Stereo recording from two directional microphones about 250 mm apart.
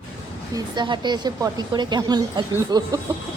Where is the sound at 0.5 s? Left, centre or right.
Centre.